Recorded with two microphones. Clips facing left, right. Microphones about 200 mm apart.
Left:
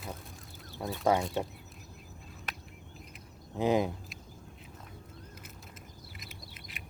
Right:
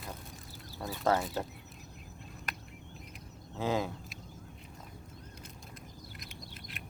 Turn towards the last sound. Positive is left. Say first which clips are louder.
# right 2 dB
turn(degrees=0)  # may be behind; listen again after turning